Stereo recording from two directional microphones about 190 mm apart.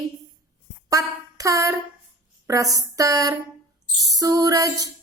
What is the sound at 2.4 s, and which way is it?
Speech, 15° right (ahead or behind).